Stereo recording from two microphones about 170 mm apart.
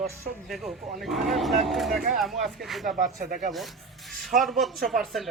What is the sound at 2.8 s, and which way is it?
Speech, 50° right (ahead or behind).